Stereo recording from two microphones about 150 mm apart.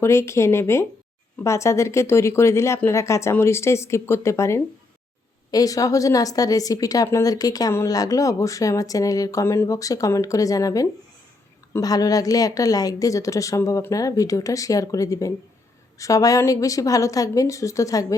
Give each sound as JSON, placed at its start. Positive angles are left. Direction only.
{"t": 0.0, "sound": "speech", "side_deg": 15}